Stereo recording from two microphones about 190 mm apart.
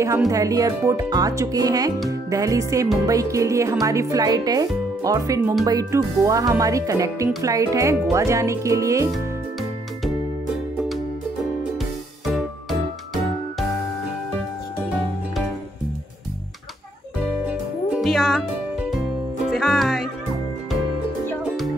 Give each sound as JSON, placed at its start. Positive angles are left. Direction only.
{"t": 0.3, "sound": "speech", "side_deg": -20}
{"t": 9.1, "sound": "music", "side_deg": 0}
{"t": 12.3, "sound": "music", "side_deg": 0}
{"t": 17.5, "sound": "music", "side_deg": -5}